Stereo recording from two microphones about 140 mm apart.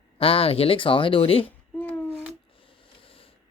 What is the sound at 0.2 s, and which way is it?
Speech, 45° left (ahead or behind).